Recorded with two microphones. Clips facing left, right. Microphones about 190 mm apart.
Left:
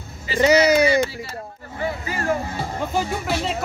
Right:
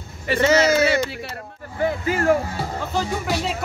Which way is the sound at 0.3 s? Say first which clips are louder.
Right 1 dB; 60° right (ahead or behind).